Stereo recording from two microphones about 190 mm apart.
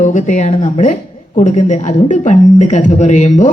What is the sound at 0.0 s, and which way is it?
Speech, 40° left (ahead or behind).